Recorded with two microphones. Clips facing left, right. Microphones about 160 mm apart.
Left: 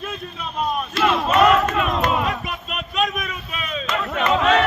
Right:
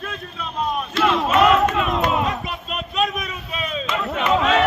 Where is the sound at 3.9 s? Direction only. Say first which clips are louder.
Even; 5° right (ahead or behind).